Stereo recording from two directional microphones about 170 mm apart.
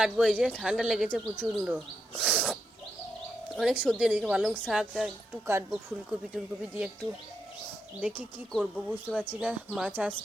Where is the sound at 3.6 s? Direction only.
5° right (ahead or behind).